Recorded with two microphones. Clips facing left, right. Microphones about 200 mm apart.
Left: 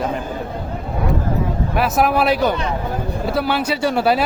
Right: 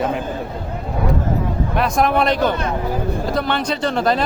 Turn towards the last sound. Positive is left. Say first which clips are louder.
# left 1 dB
turn(degrees=10)  # may be behind; listen again after turning